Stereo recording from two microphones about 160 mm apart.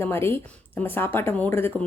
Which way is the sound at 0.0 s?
15° left (ahead or behind).